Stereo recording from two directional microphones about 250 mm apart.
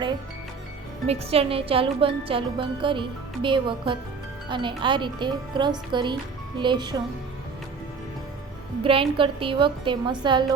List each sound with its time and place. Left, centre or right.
1.0 s speech: right
8.8 s speech: right